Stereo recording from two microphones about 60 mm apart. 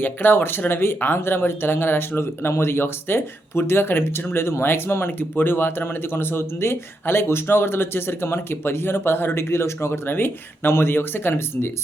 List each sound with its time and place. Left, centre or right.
0.0 s speech: left